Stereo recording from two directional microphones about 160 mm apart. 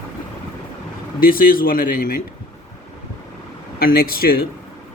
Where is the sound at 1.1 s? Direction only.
65° left (ahead or behind).